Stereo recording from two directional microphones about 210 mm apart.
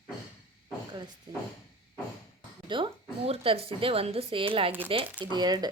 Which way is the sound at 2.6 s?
25° right (ahead or behind).